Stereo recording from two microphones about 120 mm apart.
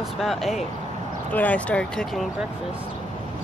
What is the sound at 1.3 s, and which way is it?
Speech, 10° left (ahead or behind).